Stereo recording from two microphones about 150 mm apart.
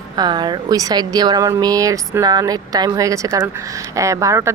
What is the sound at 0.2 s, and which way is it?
A woman's voice, 30° right (ahead or behind).